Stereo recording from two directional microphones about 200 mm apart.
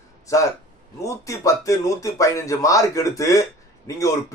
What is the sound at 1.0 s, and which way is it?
A man's voice, 15° left (ahead or behind).